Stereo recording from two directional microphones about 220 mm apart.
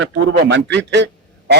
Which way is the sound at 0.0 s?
55° right (ahead or behind).